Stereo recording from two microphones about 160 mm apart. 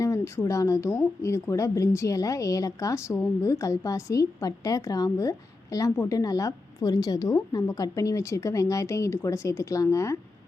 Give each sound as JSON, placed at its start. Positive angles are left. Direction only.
{"t": 0.0, "sound": "a woman's voice", "side_deg": 20}